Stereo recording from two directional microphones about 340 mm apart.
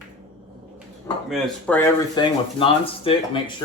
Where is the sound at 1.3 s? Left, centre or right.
Centre.